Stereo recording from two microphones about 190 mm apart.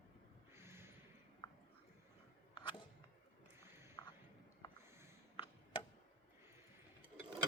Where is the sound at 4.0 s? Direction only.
20° left (ahead or behind).